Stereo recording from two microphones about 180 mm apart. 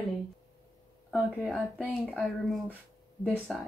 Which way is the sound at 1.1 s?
Centre (ahead or behind).